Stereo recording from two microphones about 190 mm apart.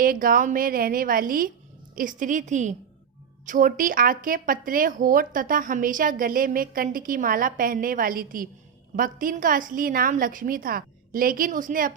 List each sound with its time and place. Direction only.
0.0 s speech: 50° right (ahead or behind)